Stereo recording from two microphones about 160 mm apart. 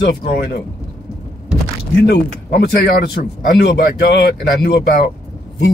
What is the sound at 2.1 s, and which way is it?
Speech, 90° left.